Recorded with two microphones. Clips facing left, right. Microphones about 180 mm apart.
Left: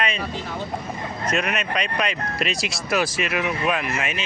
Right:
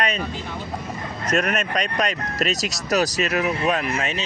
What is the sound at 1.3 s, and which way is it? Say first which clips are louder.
Speech: right 3 dB; 45° right (ahead or behind).